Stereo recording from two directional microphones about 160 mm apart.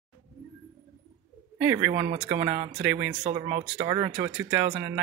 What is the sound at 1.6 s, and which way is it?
Speech, 15° right (ahead or behind).